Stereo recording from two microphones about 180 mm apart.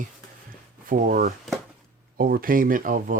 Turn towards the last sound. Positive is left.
turn(degrees=-50)  # may be behind; listen again after turning